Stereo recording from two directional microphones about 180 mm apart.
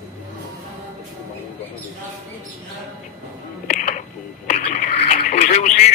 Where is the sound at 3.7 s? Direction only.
40° left (ahead or behind).